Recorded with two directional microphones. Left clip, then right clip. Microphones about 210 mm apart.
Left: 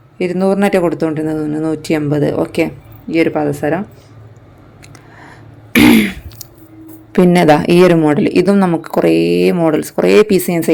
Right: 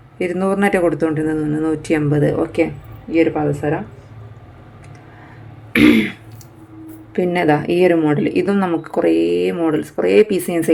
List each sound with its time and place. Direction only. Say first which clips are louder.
0.2 s speech: left 4 dB; 20° left (ahead or behind); by 3.8 s 45° left (ahead or behind)
5.7 s throat clearing: left 3 dB; 35° left (ahead or behind)
7.1 s speech: left 6 dB; 40° left (ahead or behind)